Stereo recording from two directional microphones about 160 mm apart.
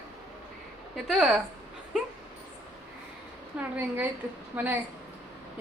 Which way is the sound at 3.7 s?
10° right (ahead or behind).